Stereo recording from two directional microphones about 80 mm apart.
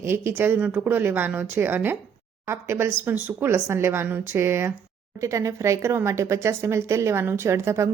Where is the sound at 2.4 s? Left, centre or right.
Right.